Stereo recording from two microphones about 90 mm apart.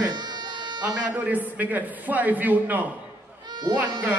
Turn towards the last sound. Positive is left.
turn(degrees=-20)  # may be behind; listen again after turning